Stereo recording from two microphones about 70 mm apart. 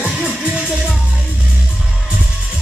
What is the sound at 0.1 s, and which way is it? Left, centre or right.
Music, centre.